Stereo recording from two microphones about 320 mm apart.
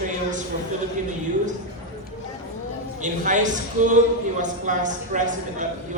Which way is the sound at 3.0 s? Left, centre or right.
Right.